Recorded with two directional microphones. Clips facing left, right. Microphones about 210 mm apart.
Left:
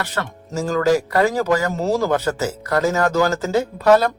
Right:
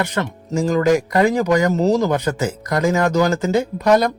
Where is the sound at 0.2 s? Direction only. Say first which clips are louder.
Right 1 dB; 15° right (ahead or behind).